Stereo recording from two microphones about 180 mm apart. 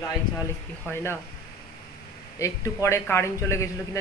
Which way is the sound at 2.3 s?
15° left (ahead or behind).